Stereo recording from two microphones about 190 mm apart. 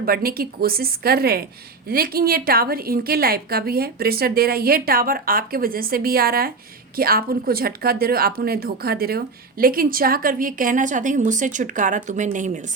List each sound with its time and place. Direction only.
0.0 s speech: 50° right (ahead or behind)